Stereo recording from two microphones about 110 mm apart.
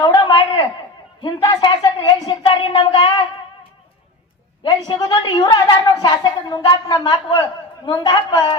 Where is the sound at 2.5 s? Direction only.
55° left (ahead or behind).